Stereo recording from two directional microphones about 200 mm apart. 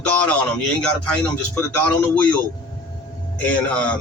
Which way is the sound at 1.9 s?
10° left (ahead or behind).